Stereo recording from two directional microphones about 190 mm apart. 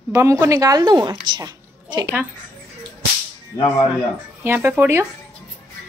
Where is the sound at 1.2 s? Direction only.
25° right (ahead or behind).